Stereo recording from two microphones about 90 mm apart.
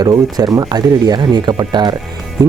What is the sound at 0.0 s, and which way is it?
Speech, 45° right (ahead or behind).